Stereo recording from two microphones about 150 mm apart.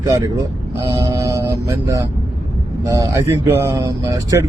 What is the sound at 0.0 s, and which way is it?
A man's voice, 20° right (ahead or behind).